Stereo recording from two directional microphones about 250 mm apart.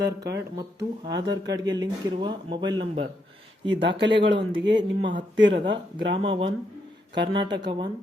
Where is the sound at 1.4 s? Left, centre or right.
Centre.